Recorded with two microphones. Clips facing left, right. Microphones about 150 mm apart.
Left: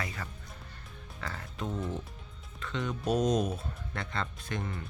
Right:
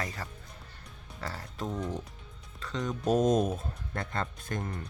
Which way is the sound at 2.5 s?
35° right (ahead or behind).